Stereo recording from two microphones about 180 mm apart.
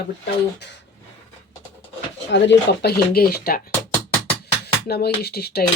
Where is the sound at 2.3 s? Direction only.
75° left (ahead or behind).